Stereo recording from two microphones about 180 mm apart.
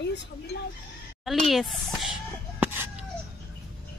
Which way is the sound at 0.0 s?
75° left (ahead or behind).